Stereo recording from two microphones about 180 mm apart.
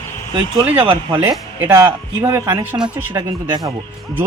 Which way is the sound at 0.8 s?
30° right (ahead or behind).